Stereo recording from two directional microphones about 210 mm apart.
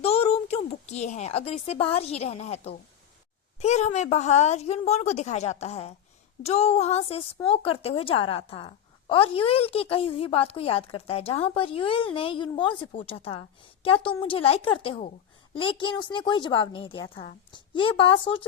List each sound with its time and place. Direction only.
0.0 s a woman's voice: 30° left (ahead or behind)